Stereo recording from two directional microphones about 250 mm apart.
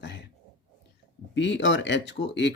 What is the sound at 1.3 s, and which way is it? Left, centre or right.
Speech, left.